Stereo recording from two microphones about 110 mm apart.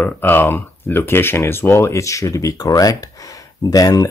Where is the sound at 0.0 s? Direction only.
20° left (ahead or behind).